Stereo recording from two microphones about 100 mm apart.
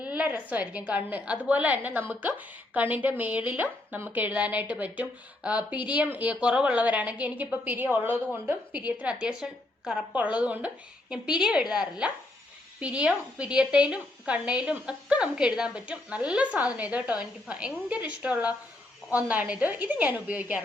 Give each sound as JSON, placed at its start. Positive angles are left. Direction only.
{"t": 0.0, "sound": "a woman's voice", "side_deg": -15}